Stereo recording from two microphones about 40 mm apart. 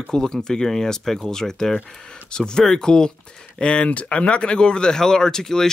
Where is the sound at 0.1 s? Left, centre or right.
Centre.